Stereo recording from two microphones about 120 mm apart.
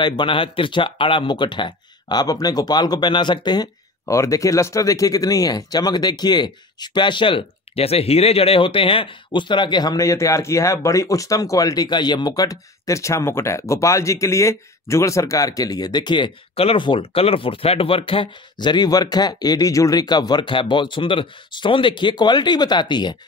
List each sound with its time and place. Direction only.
0.0 s speech: 40° left (ahead or behind)
4.0 s speech: 25° left (ahead or behind)